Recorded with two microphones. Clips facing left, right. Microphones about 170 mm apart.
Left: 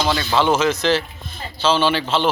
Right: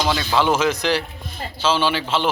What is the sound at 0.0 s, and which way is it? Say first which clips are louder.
Speech: left 1 dB; 10° right (ahead or behind).